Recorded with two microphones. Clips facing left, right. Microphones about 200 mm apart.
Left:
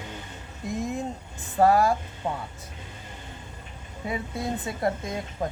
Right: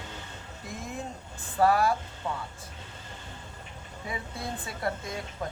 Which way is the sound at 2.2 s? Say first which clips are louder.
Left 4 dB; 40° left (ahead or behind).